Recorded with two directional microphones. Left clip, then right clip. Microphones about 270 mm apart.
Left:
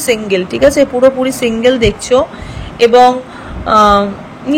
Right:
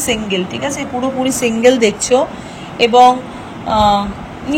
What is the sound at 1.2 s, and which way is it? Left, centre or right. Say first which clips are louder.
A woman's voice: even; centre.